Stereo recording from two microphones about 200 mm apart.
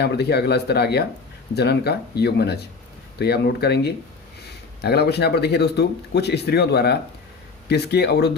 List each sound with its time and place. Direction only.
0.0 s speech: 55° left (ahead or behind)